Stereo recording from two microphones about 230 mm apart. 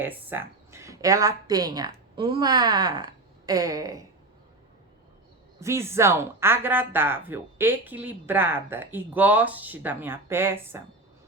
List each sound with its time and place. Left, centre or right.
0.0 s a woman's voice: centre
5.5 s speech: centre